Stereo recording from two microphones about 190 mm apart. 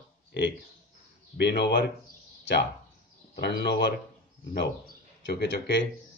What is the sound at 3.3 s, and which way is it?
Speech, 60° left (ahead or behind).